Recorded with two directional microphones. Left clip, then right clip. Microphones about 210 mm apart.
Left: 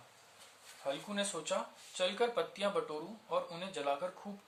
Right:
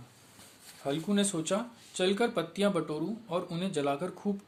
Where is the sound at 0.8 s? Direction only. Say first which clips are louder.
Right 6 dB; 50° right (ahead or behind).